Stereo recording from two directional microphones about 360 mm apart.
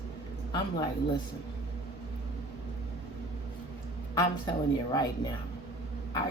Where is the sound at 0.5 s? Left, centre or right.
Centre.